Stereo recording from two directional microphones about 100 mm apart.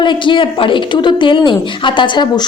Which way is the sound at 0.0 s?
55° left (ahead or behind).